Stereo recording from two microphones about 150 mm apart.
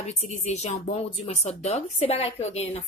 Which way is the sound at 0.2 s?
50° left (ahead or behind).